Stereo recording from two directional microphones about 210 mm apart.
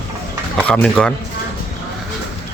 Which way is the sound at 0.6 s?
5° left (ahead or behind).